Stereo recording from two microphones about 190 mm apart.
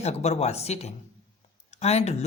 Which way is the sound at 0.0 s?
35° left (ahead or behind).